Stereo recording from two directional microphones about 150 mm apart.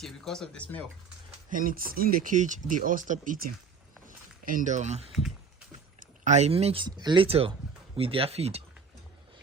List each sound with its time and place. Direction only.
0.0 s speech: 5° left (ahead or behind)
1.5 s speech: 65° right (ahead or behind)
4.0 s walk: 60° right (ahead or behind); by 5.1 s 45° right (ahead or behind)
6.0 s speech: 50° right (ahead or behind)
6.8 s speech: 30° right (ahead or behind)